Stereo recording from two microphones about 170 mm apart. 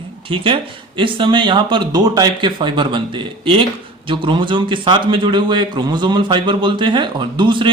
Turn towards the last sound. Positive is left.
turn(degrees=-30)  # may be behind; listen again after turning